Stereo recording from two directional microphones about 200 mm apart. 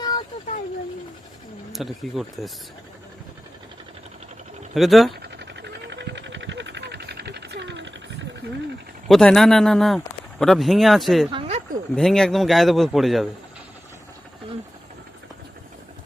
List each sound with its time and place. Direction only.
0.0 s vehicle: 20° left (ahead or behind)
1.7 s a man's voice: centre (ahead or behind)
4.7 s a man's voice: centre (ahead or behind)
5.2 s a sound: 55° right (ahead or behind)
9.0 s a man's voice: centre (ahead or behind)
11.3 s a sound: 30° right (ahead or behind)
11.9 s a man's voice: centre (ahead or behind)